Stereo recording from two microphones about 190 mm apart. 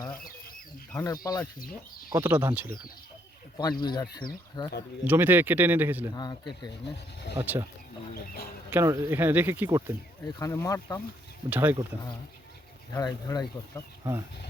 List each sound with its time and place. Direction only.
0.9 s speech: 15° left (ahead or behind)
2.1 s speech: 10° right (ahead or behind)
3.6 s speech: 20° left (ahead or behind)
5.0 s speech: 10° right (ahead or behind)
6.1 s speech: 20° left (ahead or behind)
7.3 s speech: 10° right (ahead or behind)
8.1 s a sound: 50° left (ahead or behind)
8.7 s speech: 15° right (ahead or behind)
10.3 s speech: 15° left (ahead or behind)
11.4 s speech: 10° right (ahead or behind)
12.9 s speech: 20° left (ahead or behind)